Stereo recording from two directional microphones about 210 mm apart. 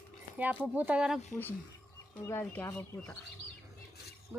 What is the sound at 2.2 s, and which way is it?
Speech, 10° left (ahead or behind).